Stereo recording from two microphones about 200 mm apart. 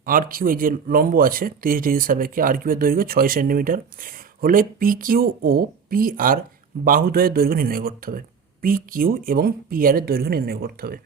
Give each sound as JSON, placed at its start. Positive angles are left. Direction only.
{"t": 0.0, "sound": "speech", "side_deg": -45}